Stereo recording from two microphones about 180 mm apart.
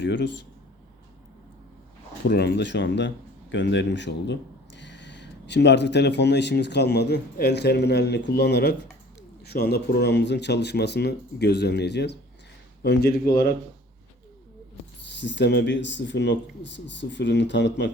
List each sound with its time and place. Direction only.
0.0 s speech: 75° left (ahead or behind)
2.2 s a man's voice: 70° left (ahead or behind)
15.1 s speech: 80° left